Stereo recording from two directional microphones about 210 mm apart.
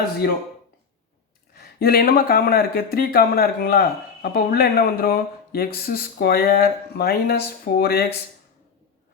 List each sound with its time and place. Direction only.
1.5 s speech: 45° left (ahead or behind)